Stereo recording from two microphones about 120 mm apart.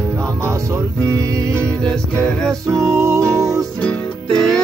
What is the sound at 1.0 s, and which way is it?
Music, 25° right (ahead or behind).